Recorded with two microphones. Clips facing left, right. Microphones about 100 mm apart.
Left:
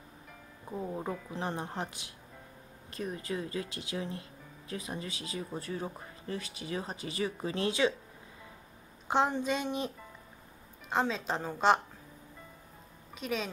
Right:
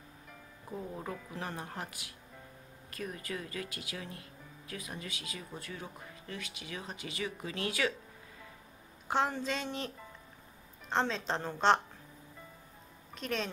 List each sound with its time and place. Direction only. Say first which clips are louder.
0.7 s a woman's voice: left 4 dB; 15° left (ahead or behind)
1.3 s speech: left 4 dB; 25° left (ahead or behind)
9.0 s a woman's voice: left 3 dB; 20° left (ahead or behind)
10.9 s a woman's voice: left 1 dB; 5° left (ahead or behind)
13.1 s speech: left 1 dB; 5° left (ahead or behind)